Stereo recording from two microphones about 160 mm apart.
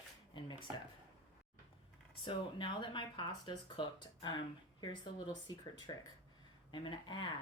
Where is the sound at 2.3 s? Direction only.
30° left (ahead or behind).